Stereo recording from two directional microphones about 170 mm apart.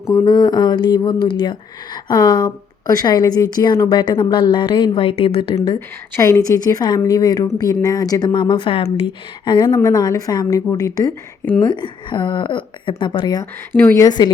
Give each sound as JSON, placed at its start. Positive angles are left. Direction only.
{"t": 0.1, "sound": "speech", "side_deg": 20}
{"t": 6.1, "sound": "speech", "side_deg": 15}
{"t": 13.7, "sound": "speech", "side_deg": 10}